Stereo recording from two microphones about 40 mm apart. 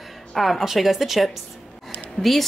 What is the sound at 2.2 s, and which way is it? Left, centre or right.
Speech, centre.